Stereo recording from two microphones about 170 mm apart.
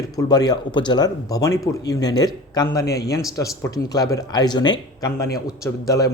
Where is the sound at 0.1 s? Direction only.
20° left (ahead or behind).